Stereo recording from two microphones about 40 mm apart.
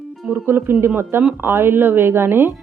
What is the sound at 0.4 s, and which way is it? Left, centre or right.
Speech, right.